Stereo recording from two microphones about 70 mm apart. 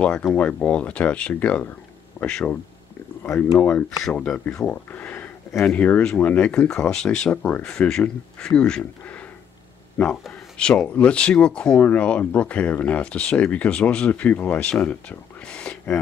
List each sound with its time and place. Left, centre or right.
0.0 s speech: centre
10.0 s speech: centre